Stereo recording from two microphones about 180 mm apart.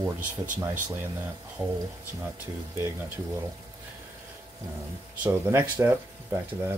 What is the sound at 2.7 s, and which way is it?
Speech, 15° right (ahead or behind).